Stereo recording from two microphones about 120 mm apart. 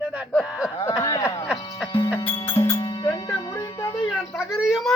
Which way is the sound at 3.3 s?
30° left (ahead or behind).